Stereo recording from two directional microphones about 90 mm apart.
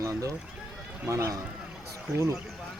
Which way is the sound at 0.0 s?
40° right (ahead or behind).